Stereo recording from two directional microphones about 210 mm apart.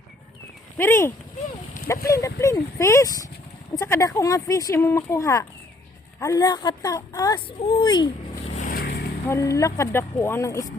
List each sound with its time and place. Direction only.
0.8 s speech: 10° left (ahead or behind)
8.5 s vehicle: 40° left (ahead or behind)
9.3 s speech: 15° left (ahead or behind)